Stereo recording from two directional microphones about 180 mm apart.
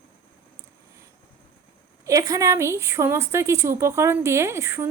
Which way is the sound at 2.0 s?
20° right (ahead or behind).